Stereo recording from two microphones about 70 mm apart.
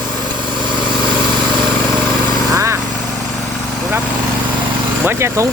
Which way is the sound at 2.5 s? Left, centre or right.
Right.